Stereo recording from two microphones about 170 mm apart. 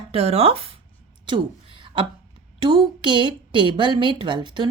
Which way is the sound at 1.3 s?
30° right (ahead or behind).